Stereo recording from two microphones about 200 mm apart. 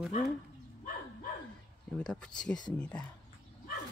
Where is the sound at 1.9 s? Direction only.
5° left (ahead or behind).